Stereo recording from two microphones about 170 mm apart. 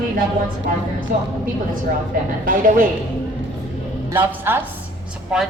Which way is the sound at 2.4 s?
55° right (ahead or behind).